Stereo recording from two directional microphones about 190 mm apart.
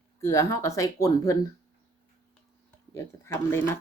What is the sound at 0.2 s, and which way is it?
Speech, 15° left (ahead or behind).